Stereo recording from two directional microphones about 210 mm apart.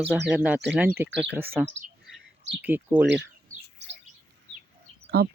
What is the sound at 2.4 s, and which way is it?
Speech, 55° right (ahead or behind).